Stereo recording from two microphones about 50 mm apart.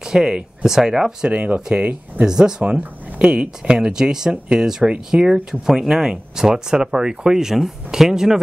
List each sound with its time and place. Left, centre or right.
0.0 s speech: centre
1.3 s speech: right
2.2 s speech: centre
3.2 s speech: right